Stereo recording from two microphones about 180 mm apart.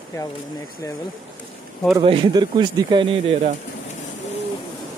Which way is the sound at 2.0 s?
25° right (ahead or behind).